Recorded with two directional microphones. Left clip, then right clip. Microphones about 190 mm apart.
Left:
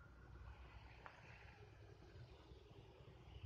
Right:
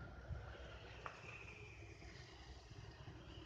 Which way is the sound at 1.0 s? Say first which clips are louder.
Right 8 dB; 55° right (ahead or behind).